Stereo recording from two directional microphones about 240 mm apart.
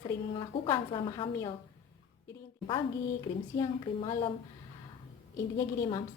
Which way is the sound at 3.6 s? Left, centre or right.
Centre.